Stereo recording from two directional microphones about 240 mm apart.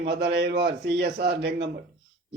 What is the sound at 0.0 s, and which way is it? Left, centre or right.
A man's voice, right.